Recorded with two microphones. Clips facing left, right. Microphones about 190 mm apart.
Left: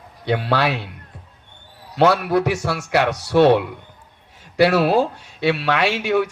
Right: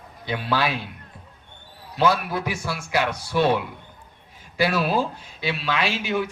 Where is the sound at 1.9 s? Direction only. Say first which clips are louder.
Left 6 dB; 70° left (ahead or behind).